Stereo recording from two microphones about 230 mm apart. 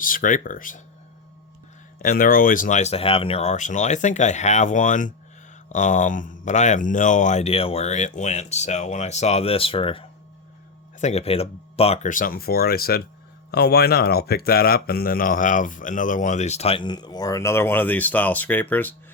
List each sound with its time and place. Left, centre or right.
0.0 s speech: left
2.0 s speech: left; by 18.9 s centre